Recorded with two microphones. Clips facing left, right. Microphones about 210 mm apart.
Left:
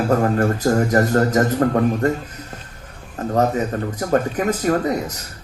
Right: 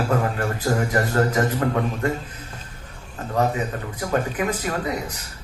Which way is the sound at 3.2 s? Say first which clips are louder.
Left 8 dB; 40° left (ahead or behind).